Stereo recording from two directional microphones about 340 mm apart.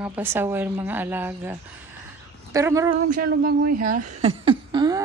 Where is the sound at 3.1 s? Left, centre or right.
Right.